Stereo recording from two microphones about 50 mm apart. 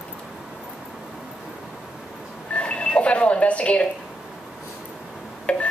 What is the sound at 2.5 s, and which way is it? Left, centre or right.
Telephone, left.